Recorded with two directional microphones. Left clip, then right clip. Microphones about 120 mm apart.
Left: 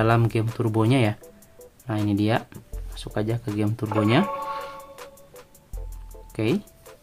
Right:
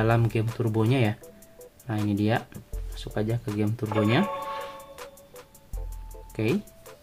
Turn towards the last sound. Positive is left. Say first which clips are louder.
# left 2 dB
turn(degrees=25)  # may be behind; listen again after turning